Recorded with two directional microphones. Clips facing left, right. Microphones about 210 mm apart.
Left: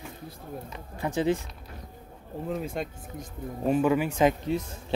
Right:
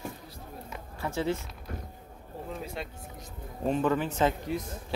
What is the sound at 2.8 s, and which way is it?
Speech, 45° left (ahead or behind).